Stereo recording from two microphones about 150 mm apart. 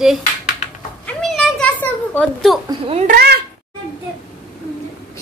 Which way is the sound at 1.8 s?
5° left (ahead or behind).